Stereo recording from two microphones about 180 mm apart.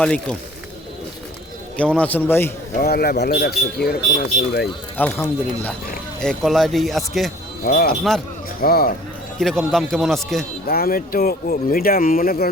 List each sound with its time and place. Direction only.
0.0 s speech: 5° left (ahead or behind)
1.7 s a man's voice: 5° left (ahead or behind)
2.7 s speech: 60° left (ahead or behind)
4.9 s a man's voice: 10° left (ahead or behind)
7.6 s speech: 50° left (ahead or behind)
9.4 s speech: centre (ahead or behind)
10.7 s speech: 55° left (ahead or behind)